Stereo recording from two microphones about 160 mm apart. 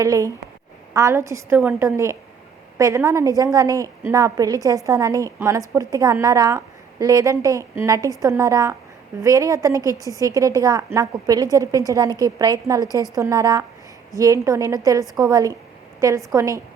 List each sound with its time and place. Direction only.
0.0 s a woman's voice: 20° right (ahead or behind)